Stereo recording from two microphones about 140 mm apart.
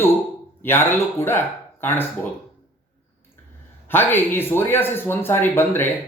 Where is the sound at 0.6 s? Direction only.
15° left (ahead or behind).